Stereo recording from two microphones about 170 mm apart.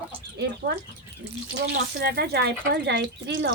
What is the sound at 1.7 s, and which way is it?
Speech, 75° right (ahead or behind).